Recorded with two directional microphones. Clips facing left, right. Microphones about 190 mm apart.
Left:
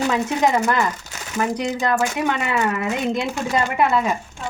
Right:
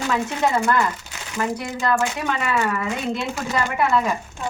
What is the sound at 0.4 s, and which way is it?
A woman's voice, 15° left (ahead or behind).